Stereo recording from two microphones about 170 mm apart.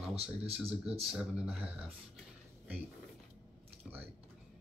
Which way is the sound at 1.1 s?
5° right (ahead or behind).